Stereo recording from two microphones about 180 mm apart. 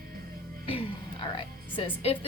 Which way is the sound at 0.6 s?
30° left (ahead or behind).